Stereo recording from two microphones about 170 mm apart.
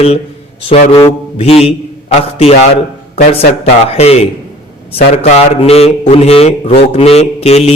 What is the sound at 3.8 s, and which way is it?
A man's voice, 40° left (ahead or behind).